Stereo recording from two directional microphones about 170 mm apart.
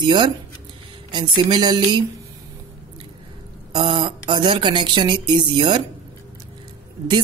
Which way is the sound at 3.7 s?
25° right (ahead or behind).